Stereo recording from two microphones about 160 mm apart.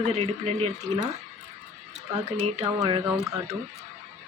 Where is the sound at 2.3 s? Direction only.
40° right (ahead or behind).